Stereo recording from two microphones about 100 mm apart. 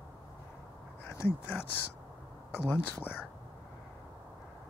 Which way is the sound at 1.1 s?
25° left (ahead or behind).